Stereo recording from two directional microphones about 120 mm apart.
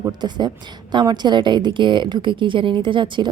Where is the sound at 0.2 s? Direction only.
40° right (ahead or behind).